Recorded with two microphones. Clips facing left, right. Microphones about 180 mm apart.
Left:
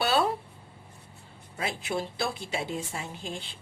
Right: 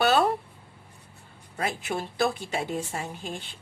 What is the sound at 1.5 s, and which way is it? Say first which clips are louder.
A woman's voice: right 1 dB; 50° right (ahead or behind).